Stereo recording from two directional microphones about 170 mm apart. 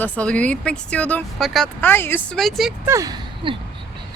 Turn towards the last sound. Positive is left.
turn(degrees=-20)  # may be behind; listen again after turning